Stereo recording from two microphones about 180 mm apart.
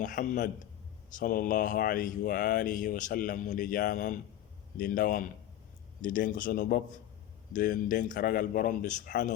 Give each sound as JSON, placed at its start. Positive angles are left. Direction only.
{"t": 0.0, "sound": "speech", "side_deg": 45}